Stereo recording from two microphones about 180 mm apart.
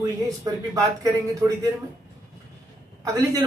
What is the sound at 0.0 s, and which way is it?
Speech, 20° right (ahead or behind).